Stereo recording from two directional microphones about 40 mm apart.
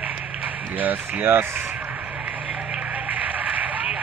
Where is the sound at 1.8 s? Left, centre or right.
Right.